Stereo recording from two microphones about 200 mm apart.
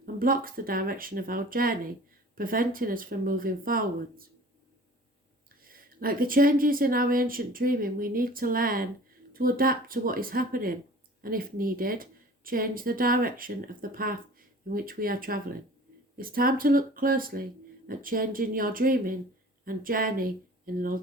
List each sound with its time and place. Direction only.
0.0 s speech: 45° right (ahead or behind)
5.6 s speech: 45° right (ahead or behind)